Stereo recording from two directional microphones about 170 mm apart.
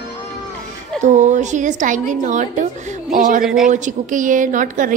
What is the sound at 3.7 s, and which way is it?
A woman's voice, 50° right (ahead or behind).